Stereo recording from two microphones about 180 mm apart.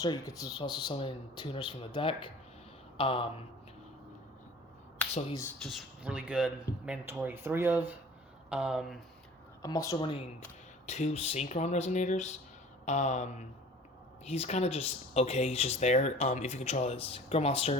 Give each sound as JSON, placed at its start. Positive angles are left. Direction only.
{"t": 0.0, "sound": "speech", "side_deg": 20}
{"t": 5.6, "sound": "speech", "side_deg": 0}
{"t": 9.6, "sound": "speech", "side_deg": 20}
{"t": 10.8, "sound": "speech", "side_deg": 40}